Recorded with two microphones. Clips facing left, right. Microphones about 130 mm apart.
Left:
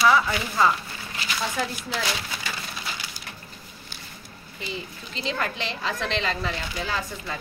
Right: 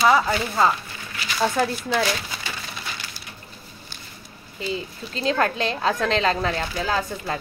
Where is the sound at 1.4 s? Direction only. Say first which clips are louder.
Right 8 dB; 60° right (ahead or behind).